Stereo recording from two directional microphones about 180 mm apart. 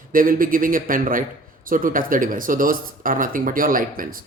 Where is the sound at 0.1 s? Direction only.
50° right (ahead or behind).